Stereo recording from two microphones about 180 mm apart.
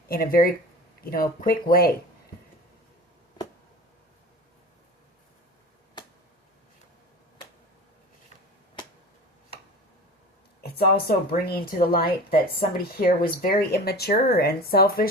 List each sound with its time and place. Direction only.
0.1 s speech: 55° left (ahead or behind)
10.6 s speech: 60° left (ahead or behind)